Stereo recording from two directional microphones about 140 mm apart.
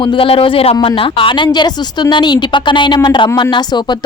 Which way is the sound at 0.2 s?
40° left (ahead or behind).